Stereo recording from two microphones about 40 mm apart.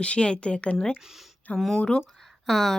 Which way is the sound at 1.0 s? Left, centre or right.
Centre.